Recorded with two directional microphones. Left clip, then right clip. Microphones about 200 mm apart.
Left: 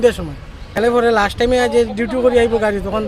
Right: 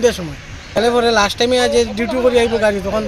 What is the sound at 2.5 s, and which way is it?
Speech, 5° left (ahead or behind).